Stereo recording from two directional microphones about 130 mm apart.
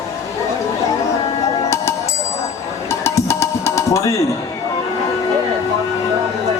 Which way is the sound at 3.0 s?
20° left (ahead or behind).